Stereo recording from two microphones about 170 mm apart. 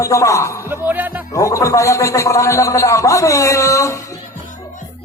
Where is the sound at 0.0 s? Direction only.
20° left (ahead or behind).